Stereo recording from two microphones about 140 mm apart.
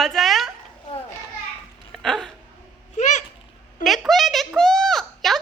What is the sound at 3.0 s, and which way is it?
Speech, 60° left (ahead or behind).